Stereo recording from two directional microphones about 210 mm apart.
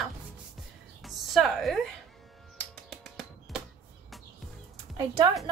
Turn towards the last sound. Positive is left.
turn(degrees=-20)  # may be behind; listen again after turning